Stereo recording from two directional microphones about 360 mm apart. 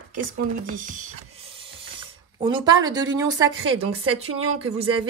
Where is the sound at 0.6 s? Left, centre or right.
Right.